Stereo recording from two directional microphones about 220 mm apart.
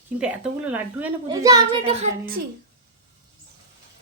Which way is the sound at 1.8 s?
30° right (ahead or behind).